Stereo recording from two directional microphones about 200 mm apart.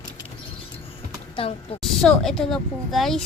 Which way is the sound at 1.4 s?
30° left (ahead or behind).